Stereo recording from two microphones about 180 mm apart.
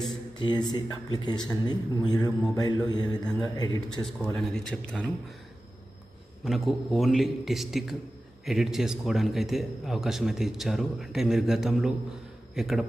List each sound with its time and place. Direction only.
0.4 s a man's voice: 25° left (ahead or behind)
4.4 s a man's voice: 5° left (ahead or behind)
6.4 s a man's voice: centre (ahead or behind)